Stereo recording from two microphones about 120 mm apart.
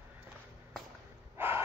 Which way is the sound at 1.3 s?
20° right (ahead or behind).